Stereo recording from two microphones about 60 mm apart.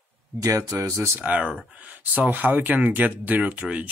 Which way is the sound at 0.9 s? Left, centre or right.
Right.